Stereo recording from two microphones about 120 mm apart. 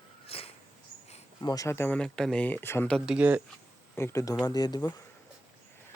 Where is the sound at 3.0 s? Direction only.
10° right (ahead or behind).